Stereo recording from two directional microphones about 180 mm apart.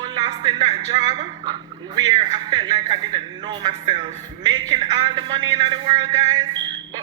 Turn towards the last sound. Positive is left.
turn(degrees=-25)  # may be behind; listen again after turning